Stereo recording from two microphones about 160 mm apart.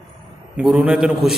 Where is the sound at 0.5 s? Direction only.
5° right (ahead or behind).